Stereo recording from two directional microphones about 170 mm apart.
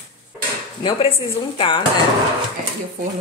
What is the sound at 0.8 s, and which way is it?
Speech, 35° left (ahead or behind).